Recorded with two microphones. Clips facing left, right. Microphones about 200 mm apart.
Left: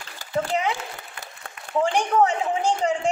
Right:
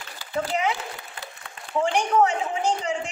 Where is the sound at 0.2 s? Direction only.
35° left (ahead or behind).